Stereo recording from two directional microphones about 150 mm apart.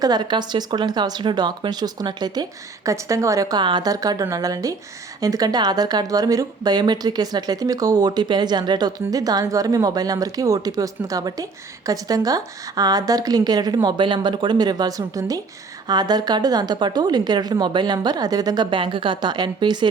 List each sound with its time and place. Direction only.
0.0 s speech: 30° right (ahead or behind)